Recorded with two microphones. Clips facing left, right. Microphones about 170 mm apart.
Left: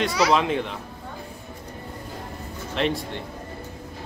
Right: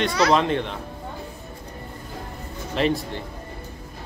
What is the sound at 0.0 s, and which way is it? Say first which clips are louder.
Speech: right 1 dB; 5° left (ahead or behind).